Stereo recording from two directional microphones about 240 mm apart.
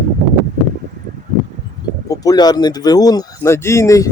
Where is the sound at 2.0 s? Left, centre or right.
Centre.